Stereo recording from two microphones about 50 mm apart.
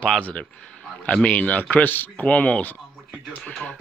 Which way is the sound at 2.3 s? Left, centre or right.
Left.